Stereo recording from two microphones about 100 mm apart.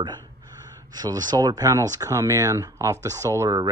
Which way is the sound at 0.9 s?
40° right (ahead or behind).